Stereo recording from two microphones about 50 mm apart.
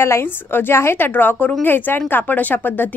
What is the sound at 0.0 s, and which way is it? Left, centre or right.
A woman's voice, left.